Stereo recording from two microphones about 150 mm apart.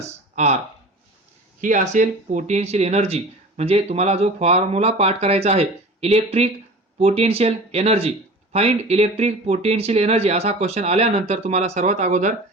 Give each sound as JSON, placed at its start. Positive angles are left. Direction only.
{"t": 0.0, "sound": "speech", "side_deg": -50}
{"t": 1.6, "sound": "speech", "side_deg": -55}